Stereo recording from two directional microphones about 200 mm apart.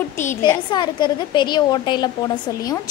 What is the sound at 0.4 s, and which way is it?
A woman's voice, 20° left (ahead or behind).